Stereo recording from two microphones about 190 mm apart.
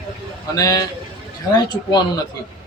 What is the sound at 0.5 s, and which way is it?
Speech, 20° left (ahead or behind).